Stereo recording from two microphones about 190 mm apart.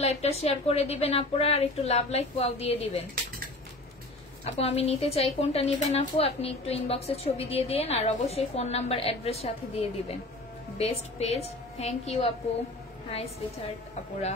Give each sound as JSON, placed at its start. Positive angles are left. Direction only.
{"t": 0.0, "sound": "a woman's voice", "side_deg": 35}
{"t": 4.5, "sound": "a woman's voice", "side_deg": 35}